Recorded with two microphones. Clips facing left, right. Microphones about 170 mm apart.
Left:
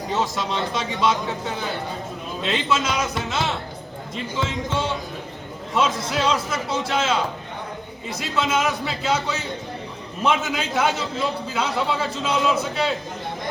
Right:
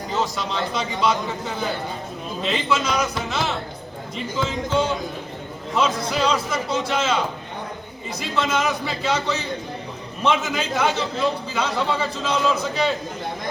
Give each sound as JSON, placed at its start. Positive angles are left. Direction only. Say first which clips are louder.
{"t": 0.2, "sound": "a man's voice", "louder": "right 1 dB", "side_deg": 0}
{"t": 8.2, "sound": "a man's voice", "louder": "even", "side_deg": 0}